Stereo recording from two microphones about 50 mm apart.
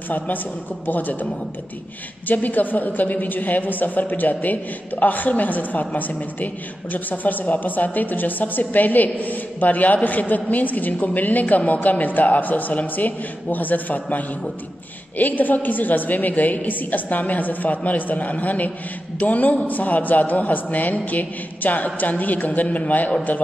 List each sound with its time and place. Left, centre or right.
0.8 s a woman's voice: left
2.2 s a woman's voice: left